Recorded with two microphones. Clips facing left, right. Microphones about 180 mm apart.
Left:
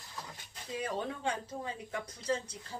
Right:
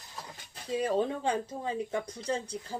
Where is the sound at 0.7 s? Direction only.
30° right (ahead or behind).